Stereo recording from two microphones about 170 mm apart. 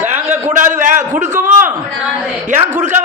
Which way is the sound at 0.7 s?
45° right (ahead or behind).